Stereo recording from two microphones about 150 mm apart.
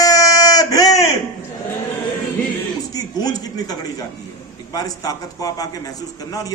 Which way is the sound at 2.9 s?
25° left (ahead or behind).